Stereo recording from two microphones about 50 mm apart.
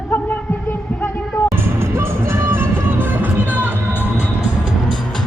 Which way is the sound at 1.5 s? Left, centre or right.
Right.